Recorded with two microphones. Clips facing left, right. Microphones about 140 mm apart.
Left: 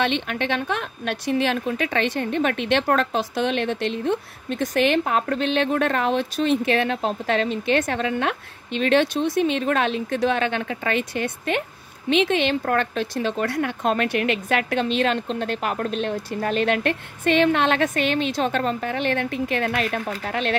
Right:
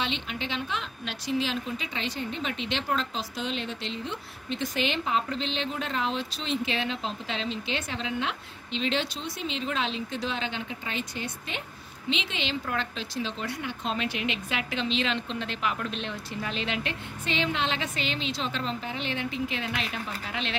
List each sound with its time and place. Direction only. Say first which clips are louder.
0.0 s a woman's voice: left 9 dB; 60° left (ahead or behind)